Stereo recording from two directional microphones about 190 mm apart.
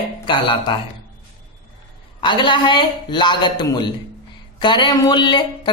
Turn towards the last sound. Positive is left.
turn(degrees=25)  # may be behind; listen again after turning